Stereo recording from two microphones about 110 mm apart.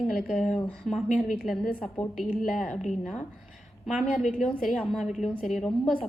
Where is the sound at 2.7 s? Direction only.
90° left.